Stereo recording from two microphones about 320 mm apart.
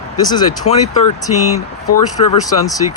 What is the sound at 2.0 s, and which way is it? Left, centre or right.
Speech, left.